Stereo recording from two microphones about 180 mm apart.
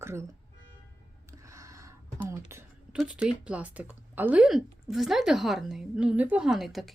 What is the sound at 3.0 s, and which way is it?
A woman's voice, 5° right (ahead or behind).